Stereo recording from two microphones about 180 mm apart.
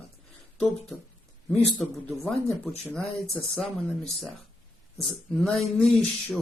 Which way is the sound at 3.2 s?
Centre (ahead or behind).